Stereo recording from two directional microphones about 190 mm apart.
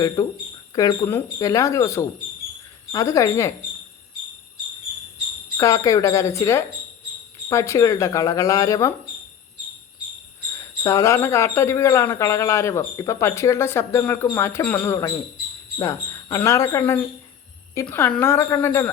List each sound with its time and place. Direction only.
0.2 s speech: 20° left (ahead or behind)
5.5 s speech: 15° left (ahead or behind)
10.8 s speech: 15° left (ahead or behind)